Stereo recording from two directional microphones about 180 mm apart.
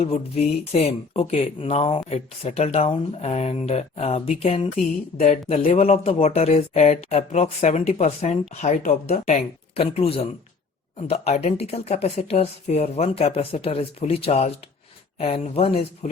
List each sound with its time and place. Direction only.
0.0 s speech: 35° left (ahead or behind)